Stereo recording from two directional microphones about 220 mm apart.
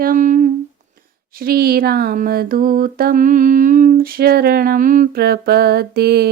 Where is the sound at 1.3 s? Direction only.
40° right (ahead or behind).